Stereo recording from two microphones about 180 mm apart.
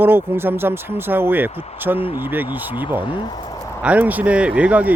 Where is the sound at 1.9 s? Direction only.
30° left (ahead or behind).